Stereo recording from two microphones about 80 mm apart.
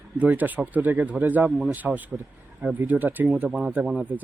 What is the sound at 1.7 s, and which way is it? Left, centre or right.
Speech, right.